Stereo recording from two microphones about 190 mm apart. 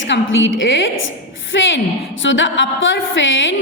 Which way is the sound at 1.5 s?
80° left.